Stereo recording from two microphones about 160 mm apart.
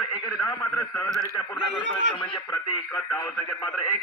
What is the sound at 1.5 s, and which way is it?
Speech, 90° right.